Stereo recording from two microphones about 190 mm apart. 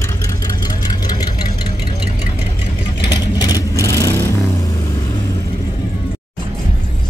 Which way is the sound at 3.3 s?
20° left (ahead or behind).